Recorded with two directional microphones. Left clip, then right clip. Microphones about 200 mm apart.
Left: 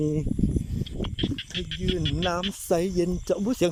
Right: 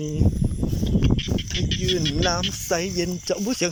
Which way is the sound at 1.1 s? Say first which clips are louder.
Right 3 dB; 10° right (ahead or behind).